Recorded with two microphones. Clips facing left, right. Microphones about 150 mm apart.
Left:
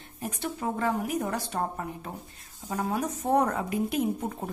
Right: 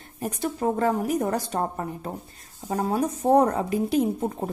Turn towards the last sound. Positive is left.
turn(degrees=-35)  # may be behind; listen again after turning